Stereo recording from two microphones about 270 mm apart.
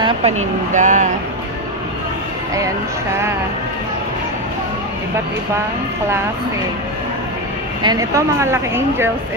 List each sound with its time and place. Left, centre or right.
0.0 s speech: right
7.8 s speech: centre